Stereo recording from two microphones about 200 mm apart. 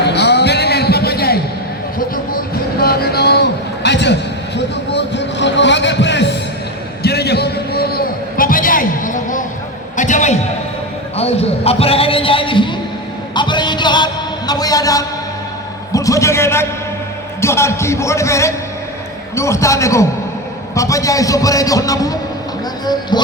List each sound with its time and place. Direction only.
0.0 s music: 55° left (ahead or behind)
2.8 s a sound: 50° left (ahead or behind); by 20.1 s 15° left (ahead or behind)
20.7 s a man's voice: 15° left (ahead or behind)